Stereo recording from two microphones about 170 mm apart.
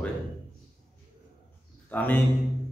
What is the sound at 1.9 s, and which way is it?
Speech, 10° left (ahead or behind).